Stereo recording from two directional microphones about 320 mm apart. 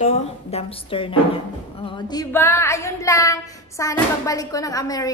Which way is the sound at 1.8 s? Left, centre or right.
Centre.